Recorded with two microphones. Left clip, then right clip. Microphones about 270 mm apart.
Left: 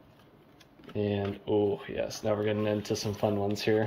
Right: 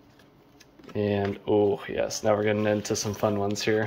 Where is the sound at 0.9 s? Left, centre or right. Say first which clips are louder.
Right 5 dB; centre.